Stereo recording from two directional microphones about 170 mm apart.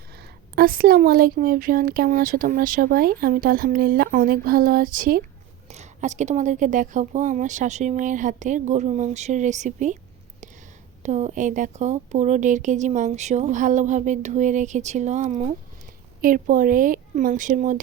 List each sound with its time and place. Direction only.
0.5 s speech: 60° right (ahead or behind)
5.6 s a woman's voice: 40° right (ahead or behind)
11.0 s a woman's voice: 45° right (ahead or behind)